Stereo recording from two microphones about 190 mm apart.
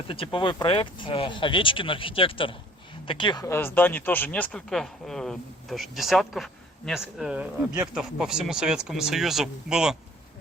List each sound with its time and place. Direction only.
0.1 s speech: 30° left (ahead or behind); by 10.0 s 5° right (ahead or behind)